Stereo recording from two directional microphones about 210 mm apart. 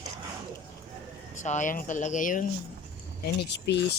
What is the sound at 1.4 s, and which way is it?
Speech, 35° left (ahead or behind).